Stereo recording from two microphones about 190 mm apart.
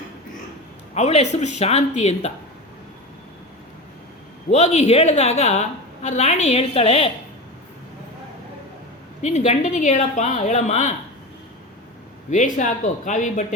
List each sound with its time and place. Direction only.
0.9 s a woman's voice: 35° left (ahead or behind)
4.4 s a woman's voice: 35° left (ahead or behind)
9.2 s a woman's voice: 35° left (ahead or behind)
12.3 s a woman's voice: 40° left (ahead or behind)